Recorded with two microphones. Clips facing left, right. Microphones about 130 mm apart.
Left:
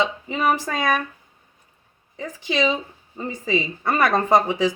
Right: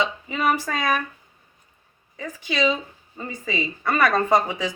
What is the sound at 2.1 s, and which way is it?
Speech, 20° left (ahead or behind).